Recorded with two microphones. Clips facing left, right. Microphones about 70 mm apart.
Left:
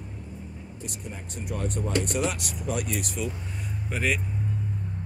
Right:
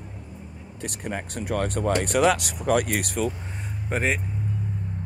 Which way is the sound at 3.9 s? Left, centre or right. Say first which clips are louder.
Right 3 dB; right.